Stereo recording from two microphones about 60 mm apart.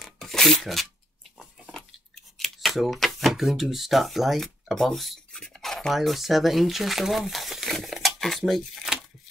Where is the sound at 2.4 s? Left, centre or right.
Centre.